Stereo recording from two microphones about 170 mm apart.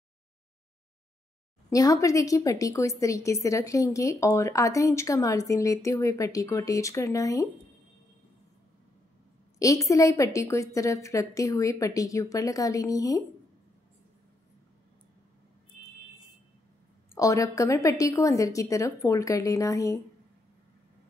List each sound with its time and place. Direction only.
1.7 s a woman's voice: 20° left (ahead or behind)
9.6 s a woman's voice: 20° left (ahead or behind)
17.1 s a woman's voice: 20° left (ahead or behind)